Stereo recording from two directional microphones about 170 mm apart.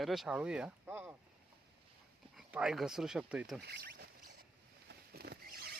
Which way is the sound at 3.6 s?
70° right (ahead or behind).